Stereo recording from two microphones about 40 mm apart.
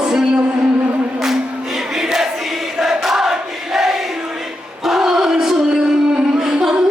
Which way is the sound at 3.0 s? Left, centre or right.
Centre.